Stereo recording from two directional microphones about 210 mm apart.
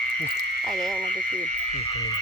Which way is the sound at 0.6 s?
Centre (ahead or behind).